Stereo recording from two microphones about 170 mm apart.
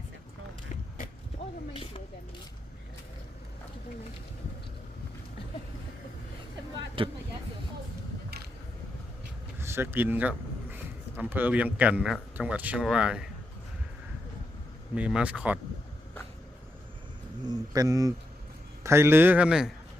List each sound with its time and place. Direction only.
1.7 s a sound: 35° left (ahead or behind)
7.0 s speech: 30° right (ahead or behind)
9.6 s vehicle: 15° right (ahead or behind)
11.2 s a man's voice: 10° right (ahead or behind)
14.9 s a man's voice: 5° right (ahead or behind)
17.4 s a man's voice: 20° right (ahead or behind); by 19.7 s 5° right (ahead or behind)